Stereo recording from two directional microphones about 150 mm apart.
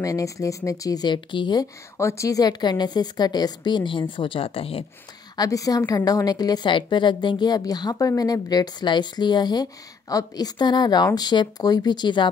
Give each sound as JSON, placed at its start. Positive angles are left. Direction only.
{"t": 0.0, "sound": "a woman's voice", "side_deg": 20}
{"t": 5.3, "sound": "a woman's voice", "side_deg": 25}